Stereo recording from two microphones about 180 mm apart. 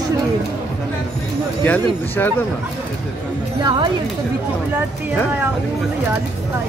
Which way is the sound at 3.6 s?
25° right (ahead or behind).